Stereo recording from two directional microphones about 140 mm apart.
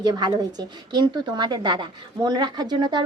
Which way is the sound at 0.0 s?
30° right (ahead or behind).